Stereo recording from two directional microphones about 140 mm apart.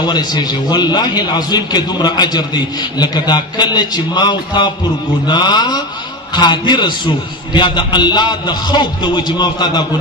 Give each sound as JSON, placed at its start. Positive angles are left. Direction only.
{"t": 0.0, "sound": "a man's voice", "side_deg": 30}